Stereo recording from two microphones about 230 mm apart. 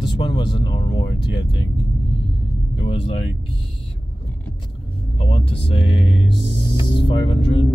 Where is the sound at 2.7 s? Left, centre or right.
Left.